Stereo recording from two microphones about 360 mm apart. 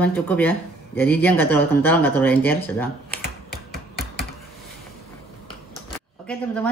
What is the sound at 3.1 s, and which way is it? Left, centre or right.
Typing, left.